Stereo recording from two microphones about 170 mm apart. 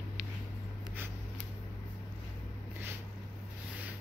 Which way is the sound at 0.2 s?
5° right (ahead or behind).